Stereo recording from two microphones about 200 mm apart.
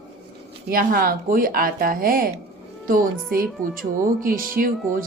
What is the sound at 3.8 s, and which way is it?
A woman's voice, 45° right (ahead or behind).